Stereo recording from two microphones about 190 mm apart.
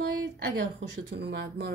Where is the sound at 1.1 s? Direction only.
60° right (ahead or behind).